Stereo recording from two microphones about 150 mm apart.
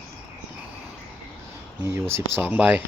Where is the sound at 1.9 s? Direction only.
15° right (ahead or behind).